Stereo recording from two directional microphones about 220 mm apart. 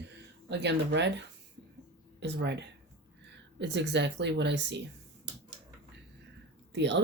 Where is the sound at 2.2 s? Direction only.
50° right (ahead or behind).